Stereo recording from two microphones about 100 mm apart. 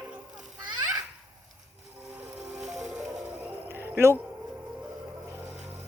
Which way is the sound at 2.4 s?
Centre (ahead or behind).